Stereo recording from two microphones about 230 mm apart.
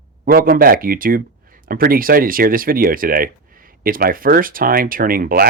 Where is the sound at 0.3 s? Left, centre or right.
Right.